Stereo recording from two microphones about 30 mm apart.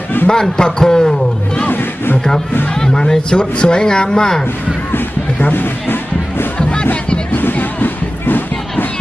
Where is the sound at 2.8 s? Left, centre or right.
Left.